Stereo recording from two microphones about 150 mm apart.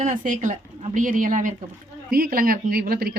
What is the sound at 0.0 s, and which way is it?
A woman's voice, 60° right (ahead or behind).